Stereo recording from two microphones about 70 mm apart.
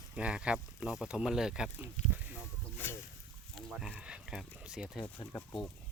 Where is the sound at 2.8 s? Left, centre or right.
Left.